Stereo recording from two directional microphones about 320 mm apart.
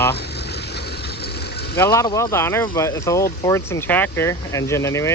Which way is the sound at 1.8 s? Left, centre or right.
Centre.